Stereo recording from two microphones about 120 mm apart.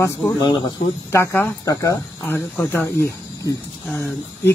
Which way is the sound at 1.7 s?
30° left (ahead or behind).